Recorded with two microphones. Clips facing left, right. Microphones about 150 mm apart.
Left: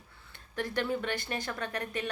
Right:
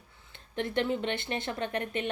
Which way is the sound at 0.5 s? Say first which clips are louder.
Right 2 dB; 25° right (ahead or behind).